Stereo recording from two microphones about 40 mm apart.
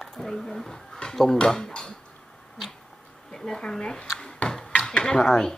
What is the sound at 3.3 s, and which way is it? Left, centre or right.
Speech, centre.